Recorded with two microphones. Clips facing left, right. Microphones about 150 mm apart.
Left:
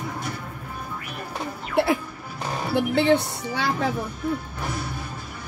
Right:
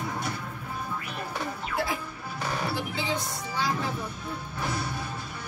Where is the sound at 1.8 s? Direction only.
65° left (ahead or behind).